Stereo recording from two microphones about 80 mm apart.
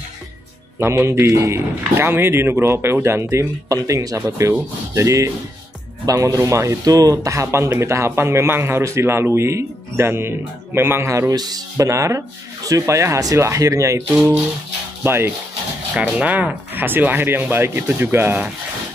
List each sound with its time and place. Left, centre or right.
0.7 s a man's voice: right
11.3 s speech: right
11.7 s a man's voice: right
15.0 s speech: right
15.9 s speech: centre